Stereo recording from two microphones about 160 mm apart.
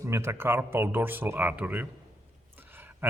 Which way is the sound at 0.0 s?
15° right (ahead or behind).